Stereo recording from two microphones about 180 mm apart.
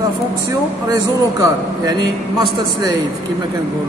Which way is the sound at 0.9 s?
20° right (ahead or behind).